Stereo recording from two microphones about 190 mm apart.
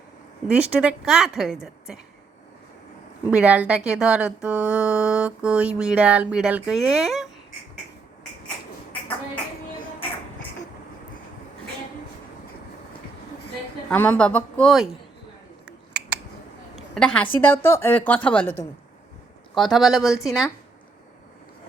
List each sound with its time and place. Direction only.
0.4 s speech: 5° right (ahead or behind)
3.2 s speech: 5° right (ahead or behind)
13.9 s speech: 10° left (ahead or behind)
15.6 s a sound: 5° right (ahead or behind)
17.4 s a woman's voice: 10° left (ahead or behind)
19.5 s speech: centre (ahead or behind)